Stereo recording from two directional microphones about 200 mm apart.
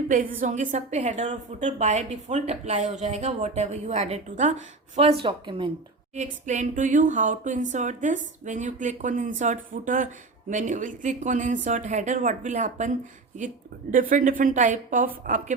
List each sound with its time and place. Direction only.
0.1 s a woman's voice: 40° right (ahead or behind); by 5.7 s 25° right (ahead or behind)
6.1 s a woman's voice: 40° right (ahead or behind)
13.9 s a woman's voice: 45° right (ahead or behind)